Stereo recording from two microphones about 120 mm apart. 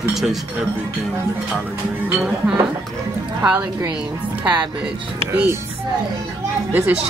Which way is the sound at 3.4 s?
15° right (ahead or behind).